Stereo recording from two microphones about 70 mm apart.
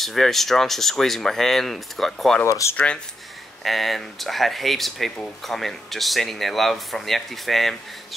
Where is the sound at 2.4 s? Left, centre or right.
Left.